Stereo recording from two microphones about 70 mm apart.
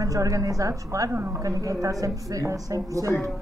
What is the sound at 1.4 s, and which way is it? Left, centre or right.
A woman's voice, right.